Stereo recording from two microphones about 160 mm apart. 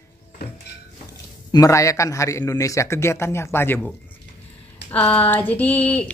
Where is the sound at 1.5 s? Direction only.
20° left (ahead or behind).